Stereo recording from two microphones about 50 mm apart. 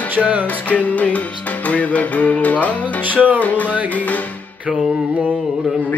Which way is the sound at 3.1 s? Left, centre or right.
Right.